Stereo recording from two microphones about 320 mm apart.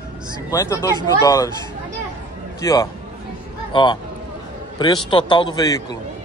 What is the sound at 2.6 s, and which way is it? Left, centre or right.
Speech, centre.